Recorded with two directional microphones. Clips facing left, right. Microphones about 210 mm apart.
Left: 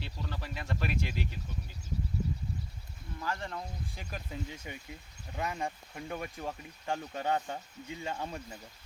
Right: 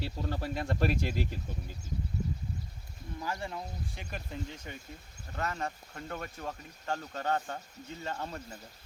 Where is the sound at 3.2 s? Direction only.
15° right (ahead or behind).